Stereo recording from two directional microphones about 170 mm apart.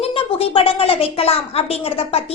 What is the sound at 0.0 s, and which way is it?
A woman's voice, 35° left (ahead or behind).